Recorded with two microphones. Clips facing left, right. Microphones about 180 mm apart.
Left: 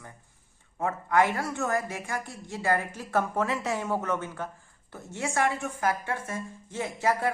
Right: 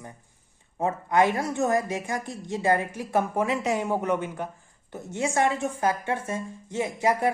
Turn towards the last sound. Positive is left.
turn(degrees=-15)  # may be behind; listen again after turning